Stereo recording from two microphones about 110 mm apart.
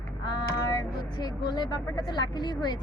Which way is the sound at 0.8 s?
40° left (ahead or behind).